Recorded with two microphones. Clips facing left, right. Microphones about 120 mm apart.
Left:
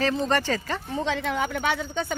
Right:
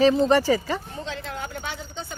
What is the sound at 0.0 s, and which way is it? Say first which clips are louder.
Speech: right 6 dB; 15° right (ahead or behind).